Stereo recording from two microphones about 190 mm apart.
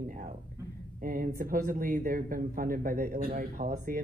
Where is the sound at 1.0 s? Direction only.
45° right (ahead or behind).